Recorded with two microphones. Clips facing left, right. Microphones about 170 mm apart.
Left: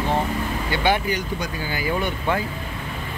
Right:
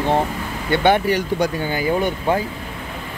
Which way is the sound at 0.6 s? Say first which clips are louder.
Right 7 dB; 55° right (ahead or behind).